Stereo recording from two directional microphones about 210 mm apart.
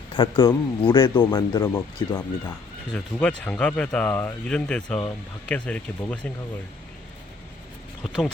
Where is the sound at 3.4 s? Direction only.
5° left (ahead or behind).